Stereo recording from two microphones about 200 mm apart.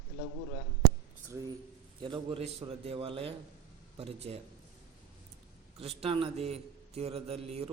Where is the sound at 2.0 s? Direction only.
25° right (ahead or behind).